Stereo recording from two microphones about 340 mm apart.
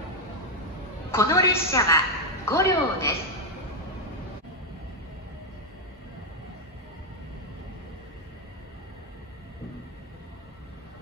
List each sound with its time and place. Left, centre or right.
1.1 s a woman's voice: centre